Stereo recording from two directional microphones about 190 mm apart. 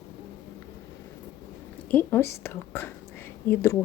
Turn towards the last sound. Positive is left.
turn(degrees=15)  # may be behind; listen again after turning